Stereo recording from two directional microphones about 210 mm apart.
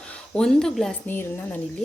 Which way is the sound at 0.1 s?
5° left (ahead or behind).